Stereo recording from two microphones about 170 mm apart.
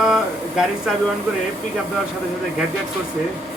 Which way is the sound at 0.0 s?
Centre (ahead or behind).